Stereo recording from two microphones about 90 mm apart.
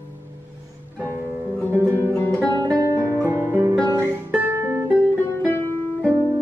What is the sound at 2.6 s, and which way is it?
Guitar, 35° right (ahead or behind).